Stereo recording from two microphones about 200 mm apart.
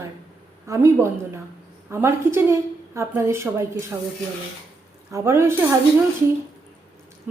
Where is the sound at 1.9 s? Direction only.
15° right (ahead or behind).